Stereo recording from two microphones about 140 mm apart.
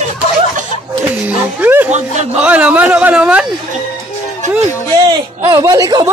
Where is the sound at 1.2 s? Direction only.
10° right (ahead or behind).